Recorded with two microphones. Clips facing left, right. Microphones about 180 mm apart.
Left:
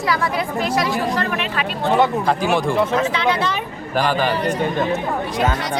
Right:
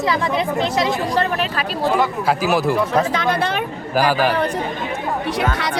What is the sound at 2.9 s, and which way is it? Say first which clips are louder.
Speech: right 1 dB; 45° right (ahead or behind).